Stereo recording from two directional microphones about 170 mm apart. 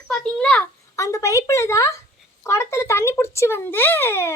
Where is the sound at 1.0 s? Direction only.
20° left (ahead or behind).